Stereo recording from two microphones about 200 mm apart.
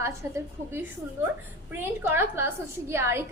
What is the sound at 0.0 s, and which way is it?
A woman's voice, 10° right (ahead or behind).